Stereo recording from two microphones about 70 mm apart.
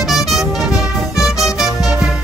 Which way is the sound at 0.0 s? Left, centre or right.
Centre.